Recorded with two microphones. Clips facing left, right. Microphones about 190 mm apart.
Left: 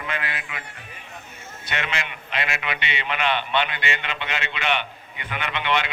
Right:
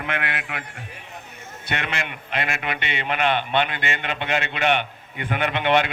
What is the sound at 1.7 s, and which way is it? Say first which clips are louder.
A man's voice: right 1 dB; 55° right (ahead or behind).